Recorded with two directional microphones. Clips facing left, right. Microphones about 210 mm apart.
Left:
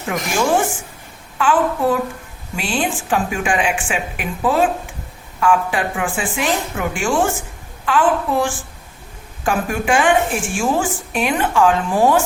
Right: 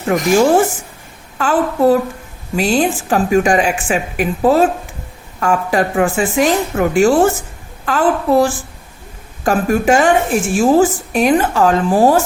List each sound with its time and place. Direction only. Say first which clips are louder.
0.1 s a woman's voice: right 7 dB; 40° right (ahead or behind)